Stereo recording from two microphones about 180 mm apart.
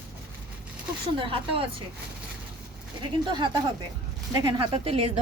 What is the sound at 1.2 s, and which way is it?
Speech, 30° right (ahead or behind).